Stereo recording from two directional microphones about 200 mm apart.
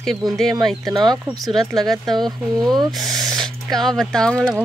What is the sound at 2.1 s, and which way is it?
Speech, centre (ahead or behind).